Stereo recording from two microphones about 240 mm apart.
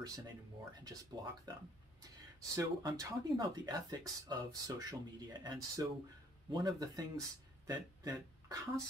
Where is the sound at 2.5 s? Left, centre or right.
Centre.